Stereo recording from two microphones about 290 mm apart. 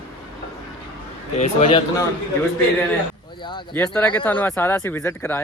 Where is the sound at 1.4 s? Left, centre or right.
Left.